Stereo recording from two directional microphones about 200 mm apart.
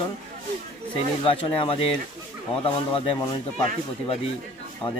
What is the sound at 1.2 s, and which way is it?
Speech, 25° left (ahead or behind).